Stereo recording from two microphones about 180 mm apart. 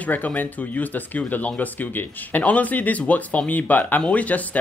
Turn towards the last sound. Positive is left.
turn(degrees=10)  # may be behind; listen again after turning